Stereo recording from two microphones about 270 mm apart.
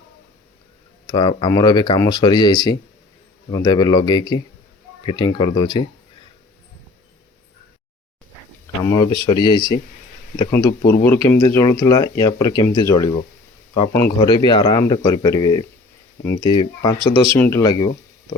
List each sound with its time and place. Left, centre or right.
1.0 s speech: centre
8.8 s speech: centre